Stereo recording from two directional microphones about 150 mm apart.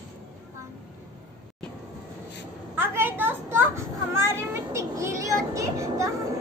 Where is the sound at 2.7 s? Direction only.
15° right (ahead or behind).